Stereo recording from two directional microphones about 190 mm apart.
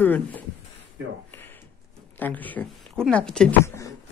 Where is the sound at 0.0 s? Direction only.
10° left (ahead or behind).